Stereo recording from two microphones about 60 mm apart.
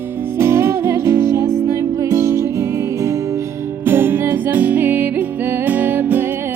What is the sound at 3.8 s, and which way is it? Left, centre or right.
Music, right.